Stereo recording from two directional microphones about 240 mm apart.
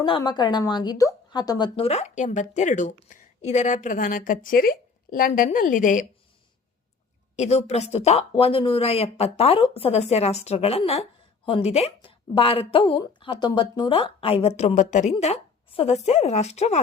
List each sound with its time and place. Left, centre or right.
0.0 s a woman's voice: centre
7.3 s speech: left